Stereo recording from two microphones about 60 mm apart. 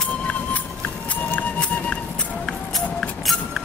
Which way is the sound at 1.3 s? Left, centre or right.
Centre.